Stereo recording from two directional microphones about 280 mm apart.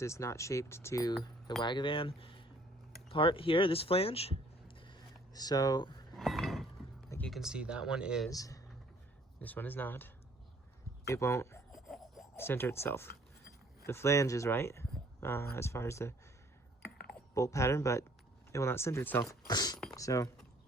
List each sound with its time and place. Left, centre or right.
0.0 s speech: centre
6.1 s chink: centre
7.1 s speech: centre
8.3 s speech: centre
11.0 s a sound: centre
13.8 s speech: centre
17.3 s speech: centre